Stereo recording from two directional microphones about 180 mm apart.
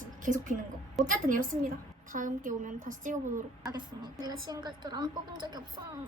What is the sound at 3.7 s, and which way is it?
A woman's voice, 25° right (ahead or behind).